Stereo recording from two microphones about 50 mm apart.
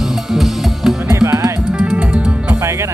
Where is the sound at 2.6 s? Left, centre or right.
Right.